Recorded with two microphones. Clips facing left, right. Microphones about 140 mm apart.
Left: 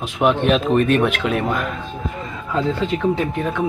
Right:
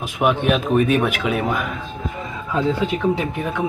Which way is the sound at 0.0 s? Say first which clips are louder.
Left 1 dB; 5° right (ahead or behind).